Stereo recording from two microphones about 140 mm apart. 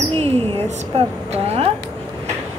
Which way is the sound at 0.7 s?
50° right (ahead or behind).